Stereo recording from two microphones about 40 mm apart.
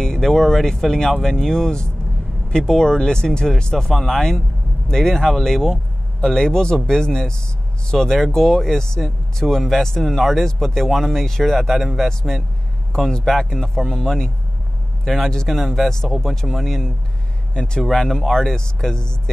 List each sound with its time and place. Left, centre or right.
0.0 s speech: centre
12.9 s speech: centre
17.6 s speech: left
17.9 s speech: centre